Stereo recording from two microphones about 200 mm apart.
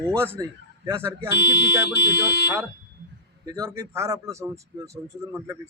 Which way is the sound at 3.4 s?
15° right (ahead or behind).